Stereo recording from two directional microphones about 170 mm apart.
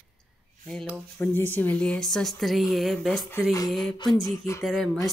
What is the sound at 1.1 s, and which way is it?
Speech, 10° left (ahead or behind).